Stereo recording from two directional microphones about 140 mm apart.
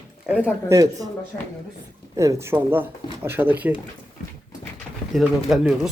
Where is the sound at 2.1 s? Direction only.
20° right (ahead or behind).